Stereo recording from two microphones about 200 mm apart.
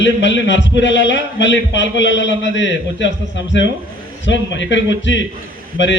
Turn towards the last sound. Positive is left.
turn(degrees=65)  # may be behind; listen again after turning